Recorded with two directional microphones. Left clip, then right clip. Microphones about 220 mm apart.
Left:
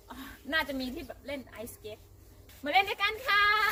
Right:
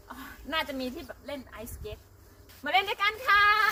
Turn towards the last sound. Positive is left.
turn(degrees=0)  # may be behind; listen again after turning